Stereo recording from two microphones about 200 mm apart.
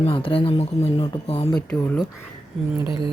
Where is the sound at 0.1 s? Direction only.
25° left (ahead or behind).